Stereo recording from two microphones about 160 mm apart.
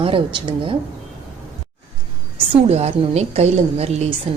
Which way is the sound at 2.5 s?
40° right (ahead or behind).